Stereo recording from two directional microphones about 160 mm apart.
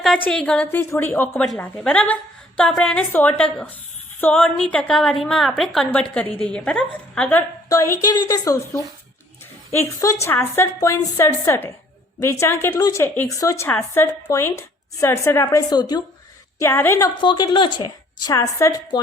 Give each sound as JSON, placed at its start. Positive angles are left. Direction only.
{"t": 0.3, "sound": "a woman's voice", "side_deg": 5}
{"t": 7.7, "sound": "a woman's voice", "side_deg": 20}
{"t": 16.6, "sound": "a woman's voice", "side_deg": 15}
{"t": 17.2, "sound": "a woman's voice", "side_deg": 30}